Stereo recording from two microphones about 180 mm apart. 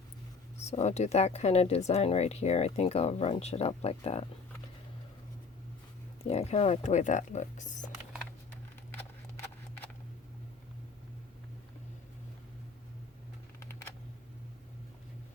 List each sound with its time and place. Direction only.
0.6 s speech: 35° left (ahead or behind)
6.2 s speech: 35° left (ahead or behind)
13.6 s a sound: 15° left (ahead or behind)